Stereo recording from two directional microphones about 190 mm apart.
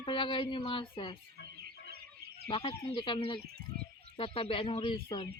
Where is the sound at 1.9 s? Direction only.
55° right (ahead or behind).